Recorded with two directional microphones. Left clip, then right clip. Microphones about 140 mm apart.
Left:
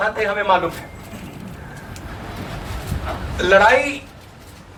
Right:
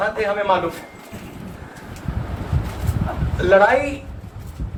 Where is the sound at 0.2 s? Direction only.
50° left (ahead or behind).